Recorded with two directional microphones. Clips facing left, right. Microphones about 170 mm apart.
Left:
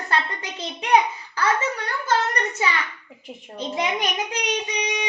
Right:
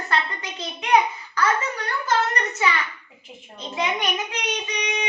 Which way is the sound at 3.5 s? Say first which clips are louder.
Left 1 dB; 35° left (ahead or behind).